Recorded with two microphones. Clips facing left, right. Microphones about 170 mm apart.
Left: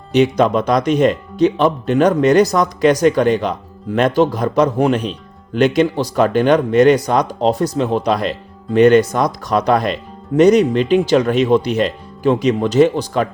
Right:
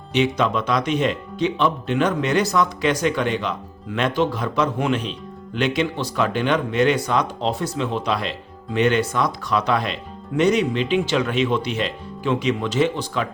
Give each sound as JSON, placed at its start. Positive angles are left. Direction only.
{"t": 0.1, "sound": "speech", "side_deg": 40}